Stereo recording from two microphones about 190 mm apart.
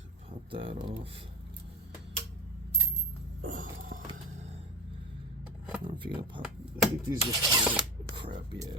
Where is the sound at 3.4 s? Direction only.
45° right (ahead or behind).